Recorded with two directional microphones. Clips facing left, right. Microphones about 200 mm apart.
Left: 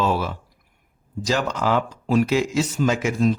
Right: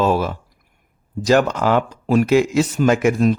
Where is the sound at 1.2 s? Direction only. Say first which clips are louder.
Right 7 dB; 55° right (ahead or behind).